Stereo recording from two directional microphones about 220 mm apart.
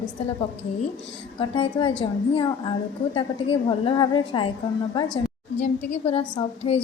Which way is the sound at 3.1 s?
25° left (ahead or behind).